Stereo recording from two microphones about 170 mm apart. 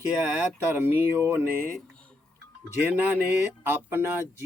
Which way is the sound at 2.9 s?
10° right (ahead or behind).